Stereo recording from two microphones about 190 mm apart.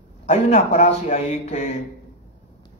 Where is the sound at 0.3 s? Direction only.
35° left (ahead or behind).